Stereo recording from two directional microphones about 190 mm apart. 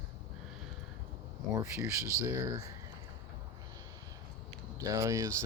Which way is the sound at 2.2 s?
15° right (ahead or behind).